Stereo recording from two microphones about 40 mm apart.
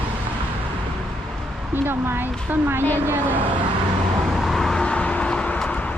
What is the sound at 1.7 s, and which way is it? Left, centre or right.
A woman's voice, right.